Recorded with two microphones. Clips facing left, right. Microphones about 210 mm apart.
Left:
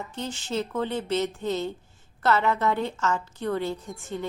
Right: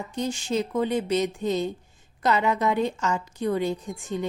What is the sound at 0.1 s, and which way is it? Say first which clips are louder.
A woman's voice: right 6 dB; 15° right (ahead or behind).